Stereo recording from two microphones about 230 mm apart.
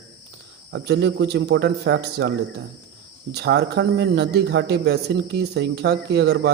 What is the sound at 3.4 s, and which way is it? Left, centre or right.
A man's voice, right.